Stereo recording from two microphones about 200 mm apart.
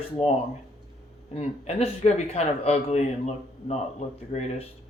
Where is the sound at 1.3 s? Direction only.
35° left (ahead or behind).